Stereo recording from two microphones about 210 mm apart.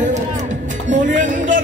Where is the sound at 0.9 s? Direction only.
35° right (ahead or behind).